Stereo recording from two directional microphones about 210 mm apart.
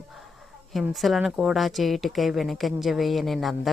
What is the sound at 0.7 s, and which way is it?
Speech, centre (ahead or behind).